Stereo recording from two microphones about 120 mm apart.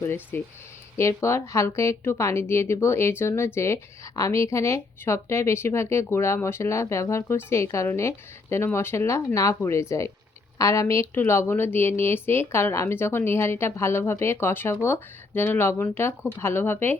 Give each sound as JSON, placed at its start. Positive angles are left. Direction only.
{"t": 0.0, "sound": "a woman's voice", "side_deg": 20}